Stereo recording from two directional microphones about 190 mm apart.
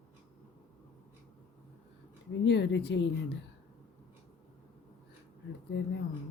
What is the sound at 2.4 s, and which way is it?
Speech, 65° left (ahead or behind).